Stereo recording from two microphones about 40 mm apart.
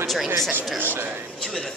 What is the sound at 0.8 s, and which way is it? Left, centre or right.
Speech, right.